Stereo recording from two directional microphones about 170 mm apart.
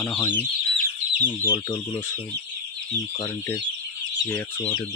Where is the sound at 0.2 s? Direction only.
10° left (ahead or behind).